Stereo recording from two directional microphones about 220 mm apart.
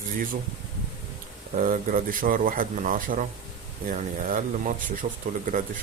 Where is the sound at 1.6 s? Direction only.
35° right (ahead or behind).